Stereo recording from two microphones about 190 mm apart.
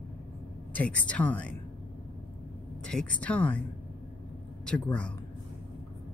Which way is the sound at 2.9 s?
5° left (ahead or behind).